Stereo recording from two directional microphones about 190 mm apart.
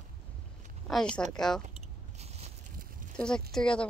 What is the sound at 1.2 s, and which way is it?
Speech, 5° left (ahead or behind).